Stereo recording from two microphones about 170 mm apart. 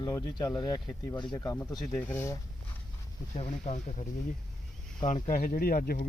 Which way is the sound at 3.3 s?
40° left (ahead or behind).